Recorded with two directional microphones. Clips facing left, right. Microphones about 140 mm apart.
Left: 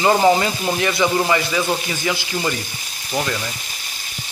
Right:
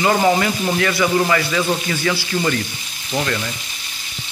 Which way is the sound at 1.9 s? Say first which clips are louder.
Right 3 dB; 15° left (ahead or behind).